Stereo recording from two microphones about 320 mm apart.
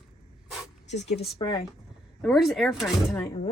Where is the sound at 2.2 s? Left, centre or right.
Centre.